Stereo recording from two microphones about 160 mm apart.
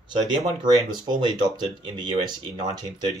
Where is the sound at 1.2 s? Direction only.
30° right (ahead or behind).